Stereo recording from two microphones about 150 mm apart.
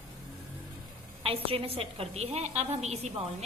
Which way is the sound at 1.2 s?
40° right (ahead or behind).